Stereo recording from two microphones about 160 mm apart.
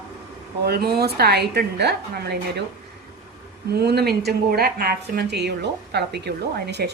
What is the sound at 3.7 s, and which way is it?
A woman's voice, 85° right.